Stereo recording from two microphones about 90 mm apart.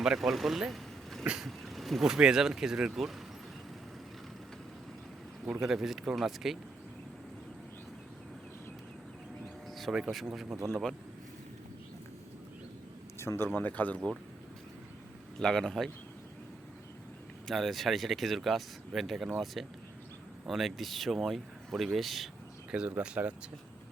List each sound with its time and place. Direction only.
0.0 s speech: 5° right (ahead or behind)
1.2 s vehicle: 10° right (ahead or behind)
1.5 s speech: centre (ahead or behind)
5.5 s speech: 5° right (ahead or behind)
9.6 s speech: centre (ahead or behind)
13.1 s speech: 30° left (ahead or behind)
15.4 s speech: 5° left (ahead or behind)
17.4 s speech: centre (ahead or behind)
23.0 s speech: 15° right (ahead or behind)